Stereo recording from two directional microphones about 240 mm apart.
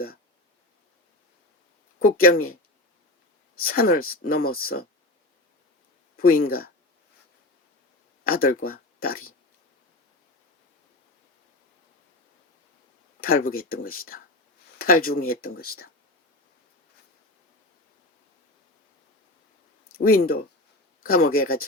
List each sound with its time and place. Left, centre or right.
2.0 s speech: left
3.6 s speech: left
6.1 s speech: left
8.2 s speech: left
13.2 s speech: left
20.0 s speech: left